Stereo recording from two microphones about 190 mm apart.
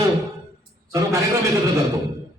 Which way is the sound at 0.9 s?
15° right (ahead or behind).